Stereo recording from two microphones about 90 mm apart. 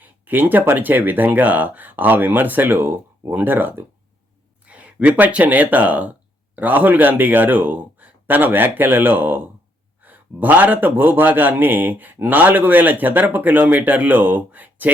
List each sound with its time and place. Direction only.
0.0 s a man's voice: 20° right (ahead or behind)